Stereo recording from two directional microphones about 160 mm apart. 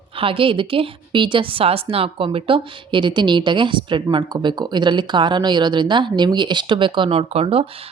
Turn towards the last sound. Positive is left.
turn(degrees=-40)  # may be behind; listen again after turning